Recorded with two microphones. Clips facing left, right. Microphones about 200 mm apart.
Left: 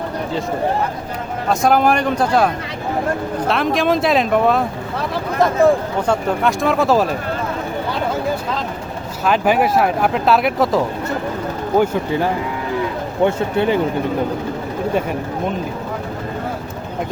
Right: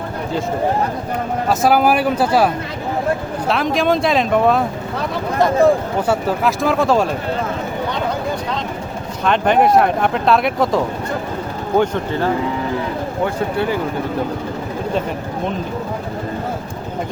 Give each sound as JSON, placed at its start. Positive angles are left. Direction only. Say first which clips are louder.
{"t": 1.5, "sound": "speech", "louder": "even", "side_deg": -5}
{"t": 3.5, "sound": "speech", "louder": "right 1 dB", "side_deg": 0}
{"t": 9.2, "sound": "speech", "louder": "right 1 dB", "side_deg": 5}
{"t": 11.8, "sound": "speech", "louder": "left 1 dB", "side_deg": 15}